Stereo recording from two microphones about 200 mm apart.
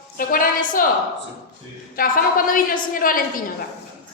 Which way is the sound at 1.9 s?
45° left (ahead or behind).